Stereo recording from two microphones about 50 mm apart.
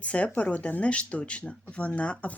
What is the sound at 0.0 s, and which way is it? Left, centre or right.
Speech, left.